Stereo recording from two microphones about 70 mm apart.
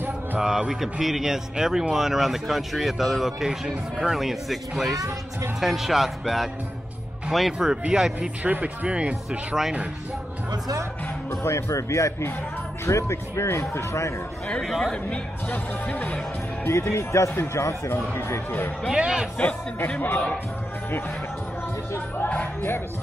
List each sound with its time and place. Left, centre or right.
0.4 s a man's voice: centre
7.5 s speech: centre
11.2 s speech: left
14.6 s a man's voice: centre
15.0 s speech: left
16.6 s speech: left
18.9 s speech: centre
19.3 s speech: centre
22.2 s speech: centre